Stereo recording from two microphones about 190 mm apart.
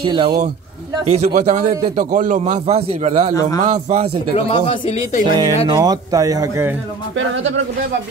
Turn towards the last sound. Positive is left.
turn(degrees=-15)  # may be behind; listen again after turning